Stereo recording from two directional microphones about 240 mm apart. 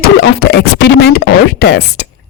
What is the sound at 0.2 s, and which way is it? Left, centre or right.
Speech, left.